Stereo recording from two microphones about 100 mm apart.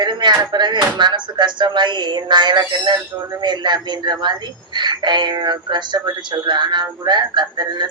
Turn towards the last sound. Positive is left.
turn(degrees=-45)  # may be behind; listen again after turning